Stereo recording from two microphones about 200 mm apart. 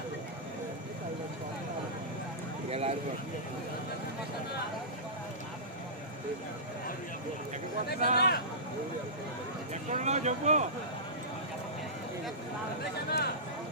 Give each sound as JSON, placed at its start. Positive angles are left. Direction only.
{"t": 2.6, "sound": "a sound", "side_deg": -30}
{"t": 8.1, "sound": "speech", "side_deg": 50}
{"t": 9.9, "sound": "speech", "side_deg": -35}
{"t": 13.1, "sound": "speech", "side_deg": 55}